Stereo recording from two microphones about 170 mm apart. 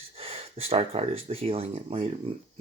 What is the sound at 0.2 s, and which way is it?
Speech, 35° right (ahead or behind).